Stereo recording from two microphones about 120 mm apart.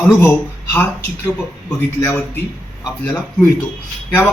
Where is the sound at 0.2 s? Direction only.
15° left (ahead or behind).